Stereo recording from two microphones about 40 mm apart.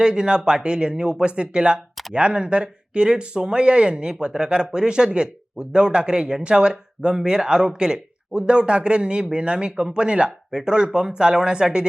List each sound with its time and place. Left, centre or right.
0.0 s speech: centre